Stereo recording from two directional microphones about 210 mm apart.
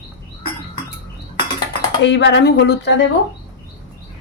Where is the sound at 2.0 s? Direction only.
55° left (ahead or behind).